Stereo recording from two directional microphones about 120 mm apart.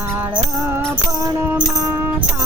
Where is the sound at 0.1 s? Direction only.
20° right (ahead or behind).